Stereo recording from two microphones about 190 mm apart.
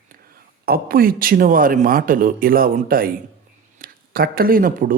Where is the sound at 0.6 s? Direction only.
50° right (ahead or behind).